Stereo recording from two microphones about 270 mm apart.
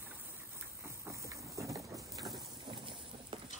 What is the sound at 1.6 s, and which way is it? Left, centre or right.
Rain, centre.